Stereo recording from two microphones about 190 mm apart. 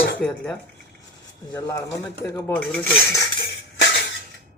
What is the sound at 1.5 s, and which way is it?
Cutlery, 15° left (ahead or behind).